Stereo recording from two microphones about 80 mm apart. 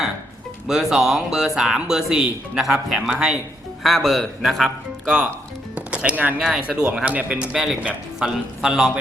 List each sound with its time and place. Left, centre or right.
0.7 s speech: centre
3.8 s a man's voice: centre
5.7 s music: centre
6.7 s speech: centre